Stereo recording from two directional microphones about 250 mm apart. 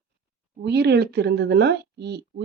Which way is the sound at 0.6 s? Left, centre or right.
Right.